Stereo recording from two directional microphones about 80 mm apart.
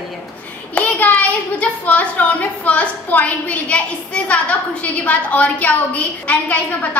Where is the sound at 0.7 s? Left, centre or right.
Left.